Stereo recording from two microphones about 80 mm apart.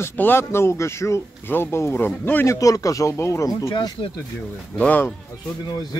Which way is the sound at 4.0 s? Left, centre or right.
Left.